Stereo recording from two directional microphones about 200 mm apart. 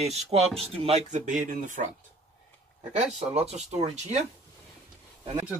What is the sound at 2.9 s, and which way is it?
Speech, 35° right (ahead or behind).